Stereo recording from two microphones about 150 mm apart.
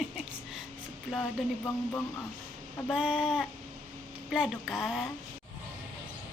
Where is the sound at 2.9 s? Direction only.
5° right (ahead or behind).